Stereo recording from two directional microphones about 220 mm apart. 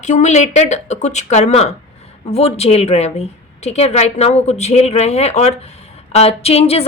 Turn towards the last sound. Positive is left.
turn(degrees=30)  # may be behind; listen again after turning